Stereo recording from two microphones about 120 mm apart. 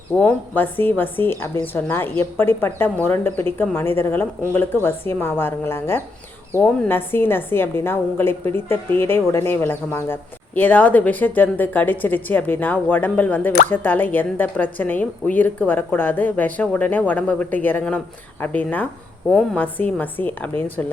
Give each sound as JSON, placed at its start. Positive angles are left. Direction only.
{"t": 0.1, "sound": "a woman's voice", "side_deg": 15}